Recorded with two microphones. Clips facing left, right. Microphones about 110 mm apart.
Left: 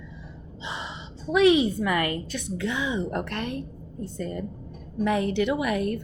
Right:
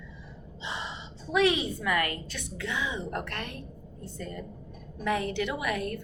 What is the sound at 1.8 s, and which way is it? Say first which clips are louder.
A woman's voice: left 3 dB; 25° left (ahead or behind).